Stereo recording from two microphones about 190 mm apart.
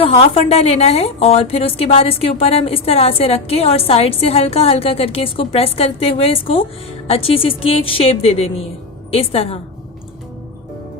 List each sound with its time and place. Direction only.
0.0 s a woman's voice: 30° left (ahead or behind)